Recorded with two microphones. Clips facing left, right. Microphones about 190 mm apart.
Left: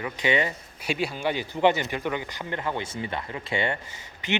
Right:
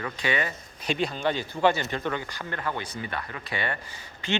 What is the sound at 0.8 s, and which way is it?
Speech, 10° left (ahead or behind).